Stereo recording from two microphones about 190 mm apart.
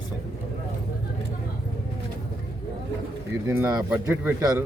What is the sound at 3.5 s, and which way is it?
Speech, 10° right (ahead or behind).